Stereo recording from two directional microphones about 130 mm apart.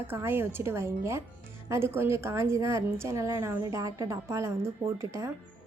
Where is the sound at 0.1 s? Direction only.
20° right (ahead or behind).